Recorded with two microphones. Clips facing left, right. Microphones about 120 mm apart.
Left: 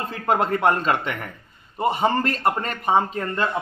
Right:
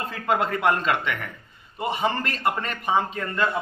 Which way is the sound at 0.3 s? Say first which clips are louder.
Left 2 dB; 45° left (ahead or behind).